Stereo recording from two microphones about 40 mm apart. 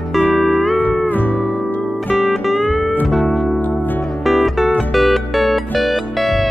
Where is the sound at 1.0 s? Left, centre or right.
Left.